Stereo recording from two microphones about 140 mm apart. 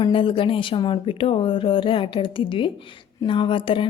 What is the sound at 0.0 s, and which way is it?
A woman's voice, 40° left (ahead or behind).